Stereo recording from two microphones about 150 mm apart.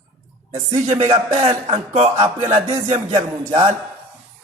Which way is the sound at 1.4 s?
35° right (ahead or behind).